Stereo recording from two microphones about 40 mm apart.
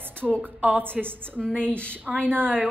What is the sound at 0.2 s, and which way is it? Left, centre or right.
A woman's voice, right.